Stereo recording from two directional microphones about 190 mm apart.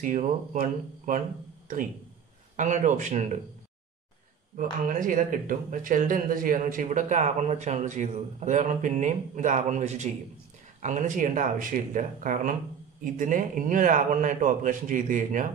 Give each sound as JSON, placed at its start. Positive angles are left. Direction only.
{"t": 0.0, "sound": "a man's voice", "side_deg": -45}
{"t": 2.5, "sound": "speech", "side_deg": -40}
{"t": 4.8, "sound": "a man's voice", "side_deg": -45}